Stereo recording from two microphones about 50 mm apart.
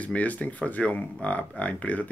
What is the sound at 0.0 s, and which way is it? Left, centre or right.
Speech, left.